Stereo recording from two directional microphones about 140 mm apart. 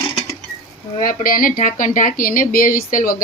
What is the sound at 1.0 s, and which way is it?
Speech, 90° left.